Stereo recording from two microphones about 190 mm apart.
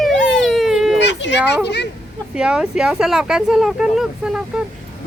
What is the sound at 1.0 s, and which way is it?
Children playing, 65° left (ahead or behind).